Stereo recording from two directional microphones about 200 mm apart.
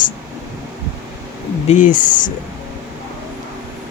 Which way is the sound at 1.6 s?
40° left (ahead or behind).